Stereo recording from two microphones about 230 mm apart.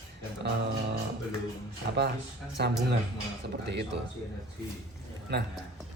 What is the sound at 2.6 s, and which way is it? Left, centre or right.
Speech, right.